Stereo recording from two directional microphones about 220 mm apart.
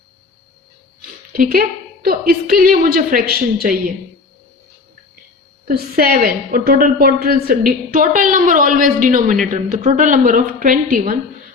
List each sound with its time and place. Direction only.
1.3 s a woman's voice: 40° right (ahead or behind)
5.6 s a woman's voice: 40° right (ahead or behind)